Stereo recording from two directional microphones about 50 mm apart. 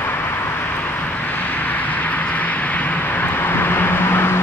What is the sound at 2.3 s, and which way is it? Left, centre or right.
Vehicle, left.